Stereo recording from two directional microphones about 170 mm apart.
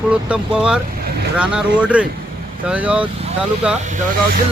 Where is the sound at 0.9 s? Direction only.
65° right (ahead or behind).